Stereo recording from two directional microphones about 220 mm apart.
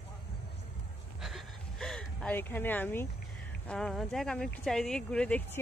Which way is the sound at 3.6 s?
5° left (ahead or behind).